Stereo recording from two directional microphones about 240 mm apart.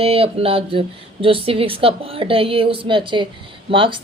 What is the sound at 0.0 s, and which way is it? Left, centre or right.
A woman's voice, right.